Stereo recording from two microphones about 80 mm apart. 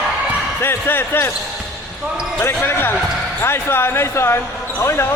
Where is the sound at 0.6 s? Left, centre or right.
Left.